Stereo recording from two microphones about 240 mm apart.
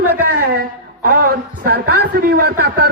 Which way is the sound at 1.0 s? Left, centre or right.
Right.